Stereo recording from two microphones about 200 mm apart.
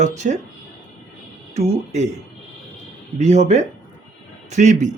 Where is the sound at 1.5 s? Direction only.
35° right (ahead or behind).